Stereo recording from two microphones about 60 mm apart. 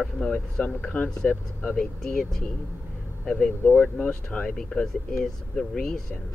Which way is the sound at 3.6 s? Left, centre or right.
Left.